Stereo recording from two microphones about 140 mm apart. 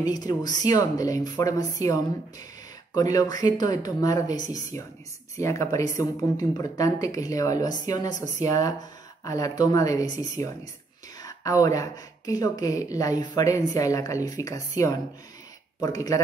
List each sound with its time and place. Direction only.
0.0 s speech: 30° left (ahead or behind)